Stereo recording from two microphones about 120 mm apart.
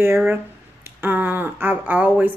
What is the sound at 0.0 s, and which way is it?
Speech, 20° right (ahead or behind).